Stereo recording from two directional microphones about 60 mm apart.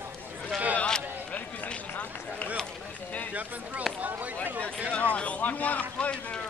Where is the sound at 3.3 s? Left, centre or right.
Right.